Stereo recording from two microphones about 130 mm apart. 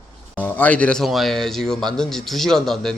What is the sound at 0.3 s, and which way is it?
A man's voice, 15° left (ahead or behind).